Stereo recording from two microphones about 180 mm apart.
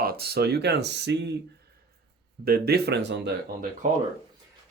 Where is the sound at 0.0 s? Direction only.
60° right (ahead or behind).